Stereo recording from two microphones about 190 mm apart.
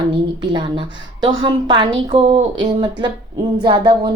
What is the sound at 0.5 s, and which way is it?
Speech, 25° right (ahead or behind).